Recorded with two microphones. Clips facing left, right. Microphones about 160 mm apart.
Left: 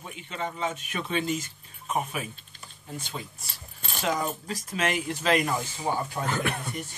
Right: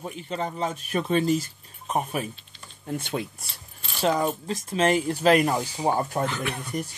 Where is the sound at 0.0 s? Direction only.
40° right (ahead or behind).